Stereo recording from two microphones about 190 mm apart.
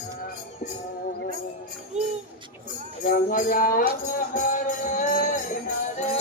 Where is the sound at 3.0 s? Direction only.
45° left (ahead or behind).